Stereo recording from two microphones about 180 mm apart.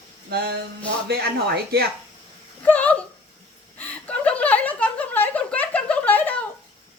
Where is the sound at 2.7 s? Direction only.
10° left (ahead or behind).